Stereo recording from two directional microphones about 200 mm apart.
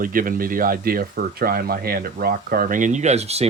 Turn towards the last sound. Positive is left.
turn(degrees=-30)  # may be behind; listen again after turning